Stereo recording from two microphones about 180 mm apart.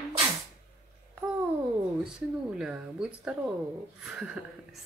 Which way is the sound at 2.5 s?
5° right (ahead or behind).